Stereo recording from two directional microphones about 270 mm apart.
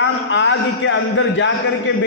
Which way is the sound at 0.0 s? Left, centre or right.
Left.